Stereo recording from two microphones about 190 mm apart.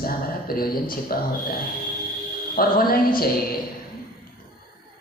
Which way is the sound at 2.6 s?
50° left (ahead or behind).